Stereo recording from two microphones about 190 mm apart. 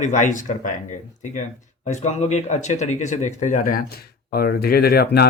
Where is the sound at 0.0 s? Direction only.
40° left (ahead or behind).